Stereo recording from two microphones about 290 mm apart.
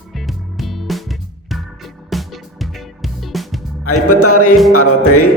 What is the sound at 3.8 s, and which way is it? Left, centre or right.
Speech, left.